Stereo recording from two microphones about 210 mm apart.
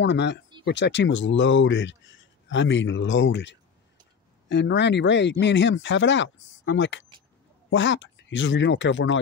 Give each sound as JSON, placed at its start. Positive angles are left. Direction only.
{"t": 0.0, "sound": "speech", "side_deg": 55}